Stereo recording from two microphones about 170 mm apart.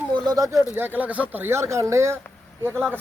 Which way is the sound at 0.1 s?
20° right (ahead or behind).